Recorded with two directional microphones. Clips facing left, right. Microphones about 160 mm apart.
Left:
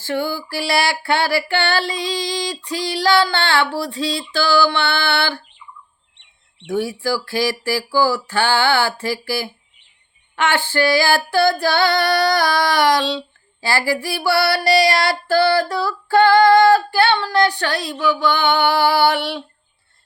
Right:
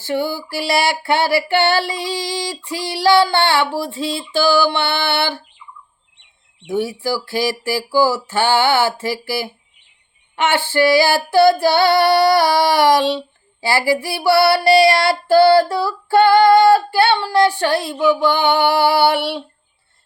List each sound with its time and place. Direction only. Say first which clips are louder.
0.0 s a sound: right 2 dB; 20° right (ahead or behind)
0.4 s child singing: right 2 dB; 25° right (ahead or behind)
6.7 s child singing: right 1 dB; 20° right (ahead or behind)